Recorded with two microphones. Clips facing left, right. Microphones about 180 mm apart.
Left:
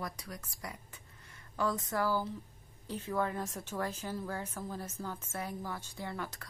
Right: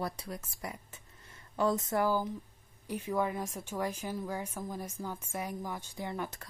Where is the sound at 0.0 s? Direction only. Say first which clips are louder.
Right 5 dB; 30° right (ahead or behind).